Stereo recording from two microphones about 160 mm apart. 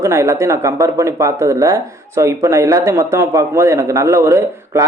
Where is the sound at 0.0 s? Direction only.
20° right (ahead or behind).